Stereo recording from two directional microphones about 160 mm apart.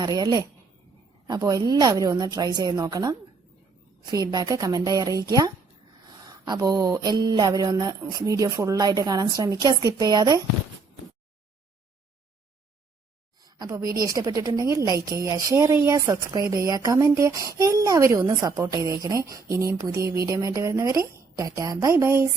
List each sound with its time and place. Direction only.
0.0 s a woman's voice: 25° right (ahead or behind)
13.4 s a woman's voice: 20° right (ahead or behind)